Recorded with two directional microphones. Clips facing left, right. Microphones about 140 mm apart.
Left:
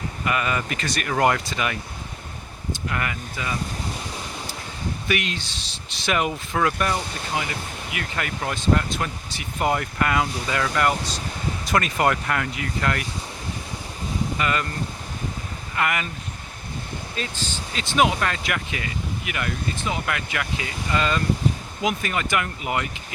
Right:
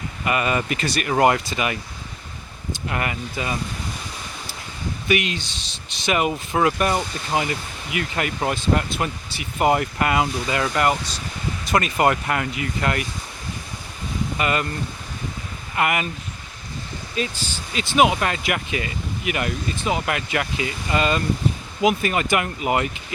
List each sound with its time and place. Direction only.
0.3 s speech: 15° right (ahead or behind)
2.9 s speech: 25° right (ahead or behind)
5.0 s speech: 5° right (ahead or behind)
14.3 s speech: 15° right (ahead or behind)
15.7 s speech: 20° right (ahead or behind)
17.2 s speech: 10° right (ahead or behind)